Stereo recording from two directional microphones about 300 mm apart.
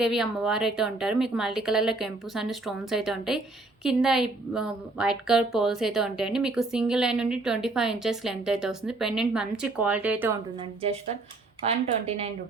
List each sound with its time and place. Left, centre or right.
0.0 s a woman's voice: centre
11.6 s speech: right